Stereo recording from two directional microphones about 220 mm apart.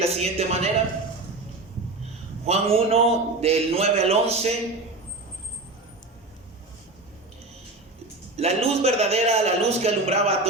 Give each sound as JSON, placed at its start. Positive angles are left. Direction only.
{"t": 0.0, "sound": "speech", "side_deg": -30}
{"t": 2.5, "sound": "speech", "side_deg": -25}
{"t": 8.4, "sound": "speech", "side_deg": -30}